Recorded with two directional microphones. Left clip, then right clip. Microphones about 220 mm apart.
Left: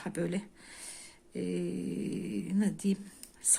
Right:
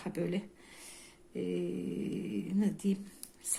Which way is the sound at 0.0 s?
10° left (ahead or behind).